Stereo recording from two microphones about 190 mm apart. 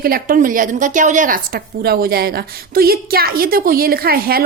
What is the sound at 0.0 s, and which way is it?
A woman's voice, 50° right (ahead or behind).